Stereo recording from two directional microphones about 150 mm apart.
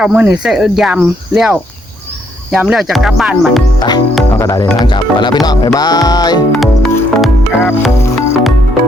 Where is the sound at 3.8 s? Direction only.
30° left (ahead or behind).